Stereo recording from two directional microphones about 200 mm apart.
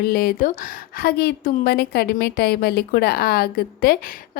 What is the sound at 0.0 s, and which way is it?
A woman's voice, 50° left (ahead or behind).